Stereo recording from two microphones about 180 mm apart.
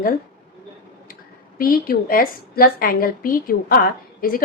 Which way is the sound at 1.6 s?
55° left (ahead or behind).